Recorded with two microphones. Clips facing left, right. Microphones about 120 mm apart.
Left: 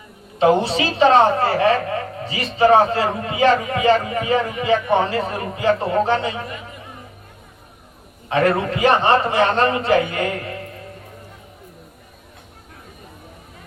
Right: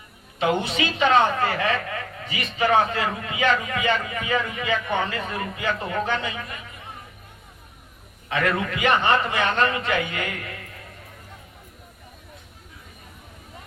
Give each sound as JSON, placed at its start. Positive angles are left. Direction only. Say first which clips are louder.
{"t": 0.3, "sound": "a woman's voice", "louder": "left 7 dB", "side_deg": 30}
{"t": 8.3, "sound": "a woman's voice", "louder": "left 6 dB", "side_deg": 35}